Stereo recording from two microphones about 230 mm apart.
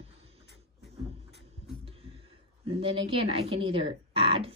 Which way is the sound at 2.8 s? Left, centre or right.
Right.